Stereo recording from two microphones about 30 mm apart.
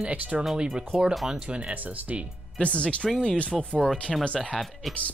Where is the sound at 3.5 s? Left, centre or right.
Centre.